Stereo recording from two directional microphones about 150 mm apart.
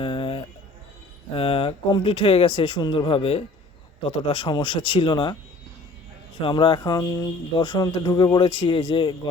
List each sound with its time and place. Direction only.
0.0 s a sound: 35° left (ahead or behind)
1.3 s speech: 40° left (ahead or behind)
6.4 s speech: 35° left (ahead or behind)